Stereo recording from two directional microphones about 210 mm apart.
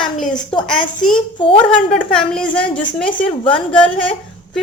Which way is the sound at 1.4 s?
25° left (ahead or behind).